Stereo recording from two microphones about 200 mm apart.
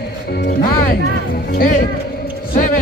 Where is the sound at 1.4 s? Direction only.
45° left (ahead or behind).